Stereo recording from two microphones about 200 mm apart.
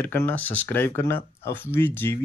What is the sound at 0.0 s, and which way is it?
Speech, 10° left (ahead or behind).